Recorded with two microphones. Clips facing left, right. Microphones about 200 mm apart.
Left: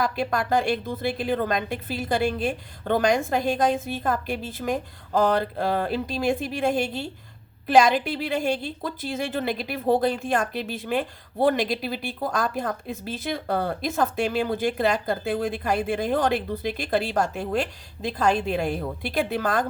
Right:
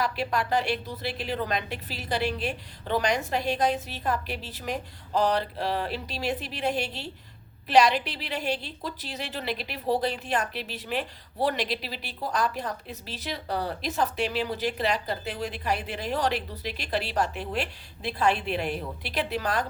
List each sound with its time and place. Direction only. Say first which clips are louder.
0.0 s a woman's voice: left 3 dB; 45° left (ahead or behind)